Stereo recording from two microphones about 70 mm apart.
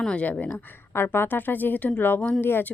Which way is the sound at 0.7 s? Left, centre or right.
Left.